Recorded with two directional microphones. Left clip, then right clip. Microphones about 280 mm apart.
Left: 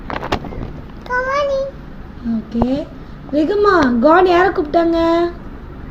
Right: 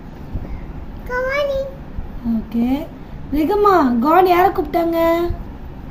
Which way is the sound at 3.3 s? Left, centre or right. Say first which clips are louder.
Left 1 dB; right.